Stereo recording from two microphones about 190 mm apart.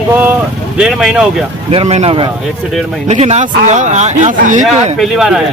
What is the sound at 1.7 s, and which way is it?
A man's voice, 35° right (ahead or behind).